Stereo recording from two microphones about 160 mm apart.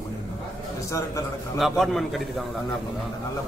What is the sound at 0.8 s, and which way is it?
Speech, 20° left (ahead or behind).